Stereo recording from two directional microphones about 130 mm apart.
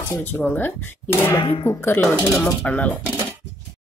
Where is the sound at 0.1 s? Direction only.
15° left (ahead or behind).